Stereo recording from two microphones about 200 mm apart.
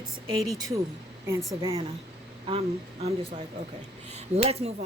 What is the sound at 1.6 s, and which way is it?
Speech, 15° right (ahead or behind).